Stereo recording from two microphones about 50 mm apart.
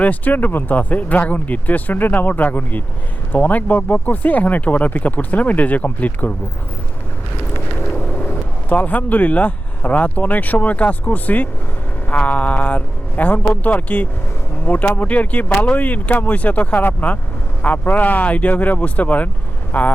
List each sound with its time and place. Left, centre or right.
0.0 s speech: left
8.2 s a man's voice: left